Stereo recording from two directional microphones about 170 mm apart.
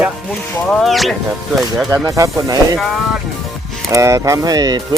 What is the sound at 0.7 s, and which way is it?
Speech, centre (ahead or behind).